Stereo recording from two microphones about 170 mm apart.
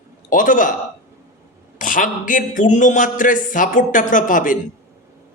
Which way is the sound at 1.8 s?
50° left (ahead or behind).